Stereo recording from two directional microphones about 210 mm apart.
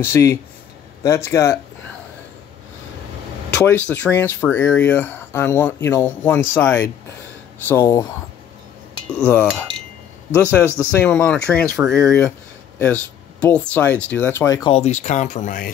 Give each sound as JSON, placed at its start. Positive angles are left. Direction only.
{"t": 0.0, "sound": "speech", "side_deg": 10}
{"t": 3.5, "sound": "speech", "side_deg": 10}
{"t": 9.2, "sound": "speech", "side_deg": 10}
{"t": 10.8, "sound": "speech", "side_deg": 10}
{"t": 14.7, "sound": "speech", "side_deg": 30}